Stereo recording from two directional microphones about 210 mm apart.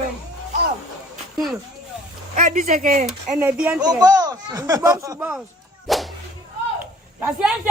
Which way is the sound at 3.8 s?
20° right (ahead or behind).